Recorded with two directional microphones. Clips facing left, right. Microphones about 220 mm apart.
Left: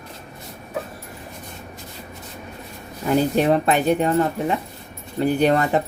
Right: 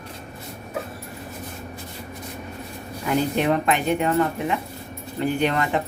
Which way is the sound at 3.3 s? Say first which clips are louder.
Left 3 dB; 35° left (ahead or behind).